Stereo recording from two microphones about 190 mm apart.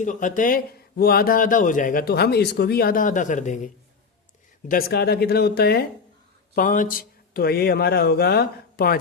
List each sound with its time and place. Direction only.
0.0 s speech: 40° left (ahead or behind)
4.7 s speech: 55° left (ahead or behind)
6.6 s speech: 45° left (ahead or behind)